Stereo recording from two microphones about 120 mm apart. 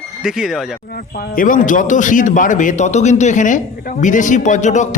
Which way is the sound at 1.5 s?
90° left.